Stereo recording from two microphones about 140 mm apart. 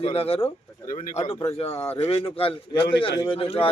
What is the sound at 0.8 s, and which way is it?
Speech, 75° left (ahead or behind).